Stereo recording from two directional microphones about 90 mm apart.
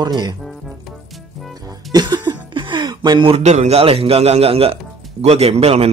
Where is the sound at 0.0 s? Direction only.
55° right (ahead or behind).